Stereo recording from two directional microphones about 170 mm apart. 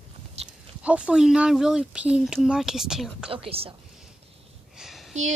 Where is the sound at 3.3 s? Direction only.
35° right (ahead or behind).